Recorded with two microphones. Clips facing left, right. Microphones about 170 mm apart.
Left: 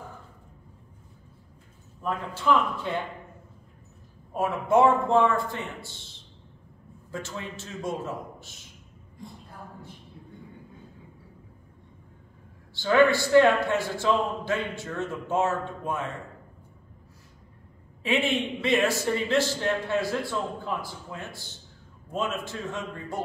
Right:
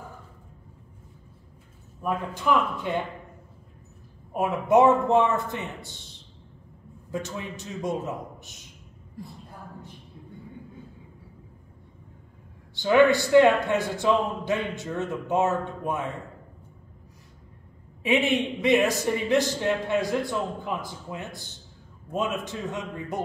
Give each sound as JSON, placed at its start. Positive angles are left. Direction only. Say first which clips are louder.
{"t": 2.0, "sound": "a man's voice", "louder": "right 2 dB", "side_deg": -15}
{"t": 4.3, "sound": "a man's voice", "louder": "right 2 dB", "side_deg": -15}
{"t": 7.1, "sound": "a man's voice", "louder": "right 3 dB", "side_deg": -15}
{"t": 12.7, "sound": "a man's voice", "louder": "right 2 dB", "side_deg": -20}
{"t": 18.0, "sound": "a man's voice", "louder": "right 3 dB", "side_deg": -15}